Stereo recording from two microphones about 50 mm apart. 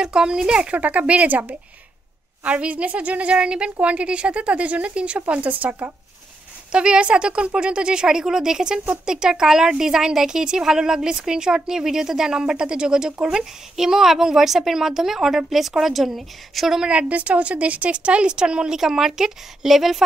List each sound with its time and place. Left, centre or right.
0.0 s speech: centre
0.7 s a woman's voice: right
6.7 s speech: centre
16.9 s a woman's voice: right; by 20.0 s centre